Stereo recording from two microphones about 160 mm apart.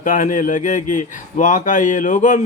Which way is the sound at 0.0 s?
55° left (ahead or behind).